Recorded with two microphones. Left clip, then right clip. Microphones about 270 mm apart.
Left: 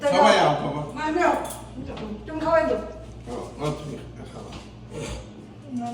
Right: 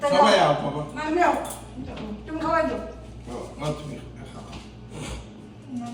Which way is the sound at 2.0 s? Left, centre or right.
Centre.